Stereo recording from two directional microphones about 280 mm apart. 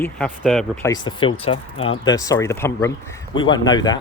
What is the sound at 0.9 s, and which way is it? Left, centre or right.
Speech, centre.